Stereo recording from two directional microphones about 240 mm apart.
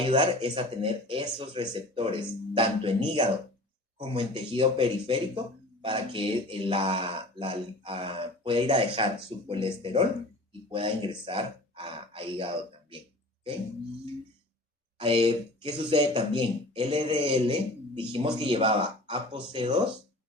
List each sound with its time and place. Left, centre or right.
0.0 s speech: centre
14.9 s speech: right